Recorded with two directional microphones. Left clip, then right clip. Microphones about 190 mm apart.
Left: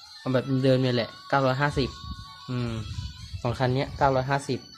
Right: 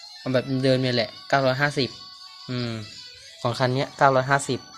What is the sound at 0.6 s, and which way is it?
Speech, centre (ahead or behind).